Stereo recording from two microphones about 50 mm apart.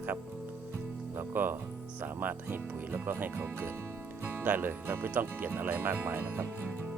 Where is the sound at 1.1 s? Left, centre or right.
Right.